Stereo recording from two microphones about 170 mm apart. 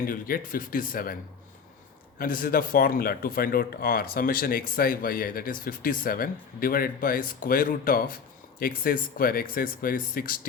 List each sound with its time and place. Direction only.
0.0 s speech: 55° left (ahead or behind)